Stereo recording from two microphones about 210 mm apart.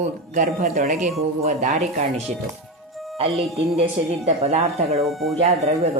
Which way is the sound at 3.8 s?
30° right (ahead or behind).